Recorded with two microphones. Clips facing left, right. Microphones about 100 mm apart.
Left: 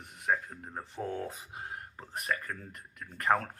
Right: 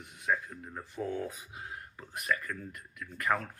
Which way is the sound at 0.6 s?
30° left (ahead or behind).